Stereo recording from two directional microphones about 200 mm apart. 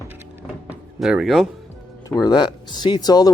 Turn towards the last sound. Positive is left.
turn(degrees=20)  # may be behind; listen again after turning